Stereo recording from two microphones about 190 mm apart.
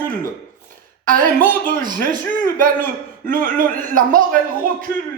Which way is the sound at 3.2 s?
45° right (ahead or behind).